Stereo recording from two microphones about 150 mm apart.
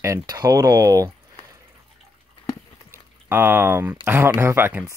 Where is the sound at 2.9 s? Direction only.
15° right (ahead or behind).